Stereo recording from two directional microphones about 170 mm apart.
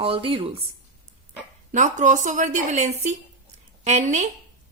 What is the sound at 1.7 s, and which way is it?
A woman's voice, 45° right (ahead or behind).